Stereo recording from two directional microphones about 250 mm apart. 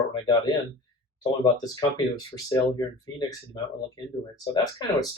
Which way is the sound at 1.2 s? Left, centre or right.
Centre.